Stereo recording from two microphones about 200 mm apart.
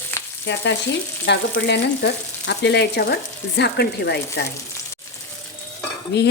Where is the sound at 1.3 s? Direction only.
60° left (ahead or behind).